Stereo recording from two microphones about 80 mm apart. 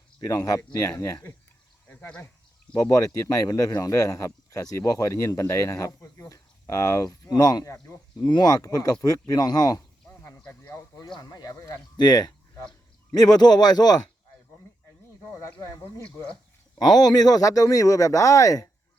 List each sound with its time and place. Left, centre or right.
0.4 s speech: left
1.9 s speech: centre
2.9 s speech: left
8.2 s speech: left
10.6 s speech: left
11.2 s a man's voice: left
15.4 s speech: left
16.0 s speech: centre
16.7 s speech: left